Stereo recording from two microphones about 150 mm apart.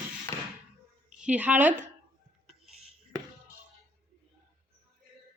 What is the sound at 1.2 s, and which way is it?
Speech, 10° right (ahead or behind).